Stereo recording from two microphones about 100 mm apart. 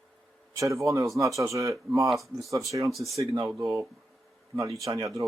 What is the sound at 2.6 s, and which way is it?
Speech, 35° right (ahead or behind).